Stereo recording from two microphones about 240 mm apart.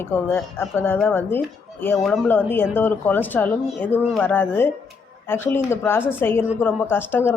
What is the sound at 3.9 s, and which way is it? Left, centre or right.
Speech, centre.